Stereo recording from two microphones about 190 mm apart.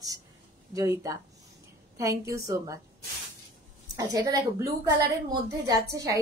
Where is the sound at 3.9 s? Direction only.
20° right (ahead or behind).